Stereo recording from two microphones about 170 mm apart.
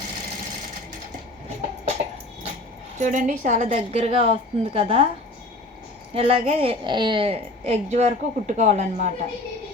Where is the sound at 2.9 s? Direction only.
45° right (ahead or behind).